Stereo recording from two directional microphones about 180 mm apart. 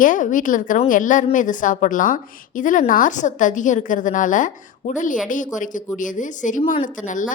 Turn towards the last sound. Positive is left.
turn(degrees=45)  # may be behind; listen again after turning